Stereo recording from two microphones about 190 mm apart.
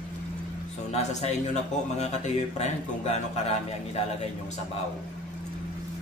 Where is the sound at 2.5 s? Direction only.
35° left (ahead or behind).